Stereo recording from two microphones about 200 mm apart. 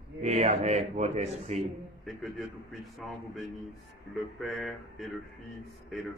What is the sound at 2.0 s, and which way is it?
A man's voice, centre (ahead or behind).